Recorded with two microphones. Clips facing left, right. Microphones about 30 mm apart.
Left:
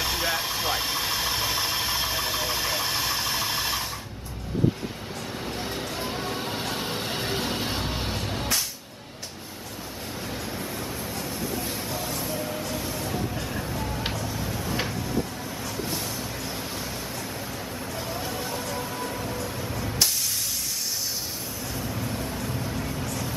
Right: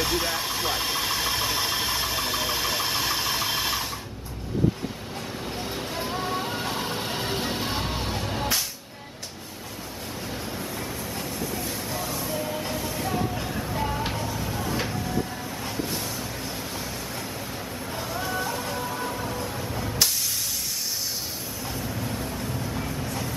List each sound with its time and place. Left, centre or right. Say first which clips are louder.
0.0 s engine: even; centre
5.4 s vehicle: left 1 dB; centre
12.0 s music: right 1 dB; centre
13.0 s a sound: right 2 dB; centre
13.7 s music: right 4 dB; centre
14.2 s a sound: right 1 dB; centre
15.8 s a sound: right 1 dB; centre
18.0 s vehicle: right 3 dB; centre
18.3 s music: right 2 dB; centre
19.8 s spray: even; centre
22.4 s vehicle: even; right